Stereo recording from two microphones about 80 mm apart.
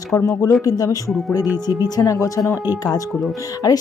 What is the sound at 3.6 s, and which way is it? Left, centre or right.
Speech, left.